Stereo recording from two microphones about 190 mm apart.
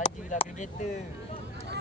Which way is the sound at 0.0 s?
40° left (ahead or behind).